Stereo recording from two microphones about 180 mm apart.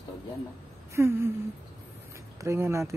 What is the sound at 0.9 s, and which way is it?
Speech, 15° right (ahead or behind).